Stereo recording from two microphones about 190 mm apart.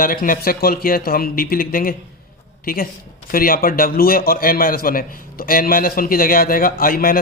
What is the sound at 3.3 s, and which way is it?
A man's voice, 50° left (ahead or behind).